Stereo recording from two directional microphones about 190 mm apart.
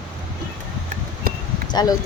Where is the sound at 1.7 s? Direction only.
20° left (ahead or behind).